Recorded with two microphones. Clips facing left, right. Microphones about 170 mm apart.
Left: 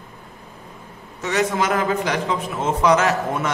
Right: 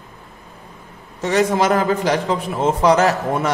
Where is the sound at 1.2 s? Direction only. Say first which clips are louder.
Right 4 dB; 35° right (ahead or behind).